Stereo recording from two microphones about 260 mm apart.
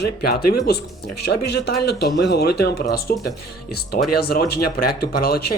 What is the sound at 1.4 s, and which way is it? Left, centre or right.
Speech, left.